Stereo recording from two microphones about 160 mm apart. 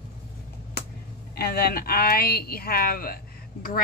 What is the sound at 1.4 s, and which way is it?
Speech, 75° left (ahead or behind).